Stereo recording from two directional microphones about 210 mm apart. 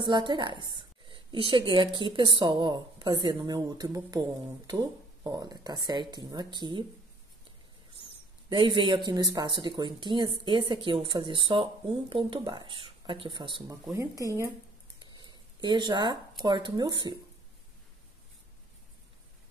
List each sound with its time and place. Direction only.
0.0 s a woman's voice: 20° right (ahead or behind)
8.5 s a woman's voice: 20° right (ahead or behind)
15.0 s a sound: 20° right (ahead or behind)
16.4 s a woman's voice: 20° right (ahead or behind)